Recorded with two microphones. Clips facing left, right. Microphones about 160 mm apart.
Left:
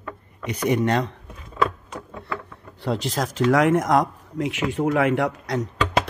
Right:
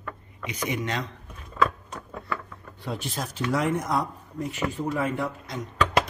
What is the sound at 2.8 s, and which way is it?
Speech, 90° left.